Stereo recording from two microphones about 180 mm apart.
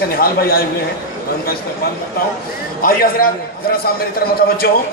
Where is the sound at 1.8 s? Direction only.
55° left (ahead or behind).